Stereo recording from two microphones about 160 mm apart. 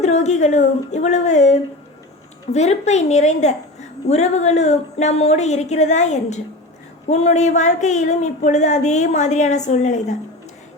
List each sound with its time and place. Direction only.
0.0 s a woman's voice: 45° left (ahead or behind)